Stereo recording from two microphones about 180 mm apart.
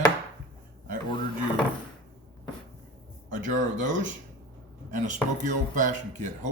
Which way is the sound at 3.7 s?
45° right (ahead or behind).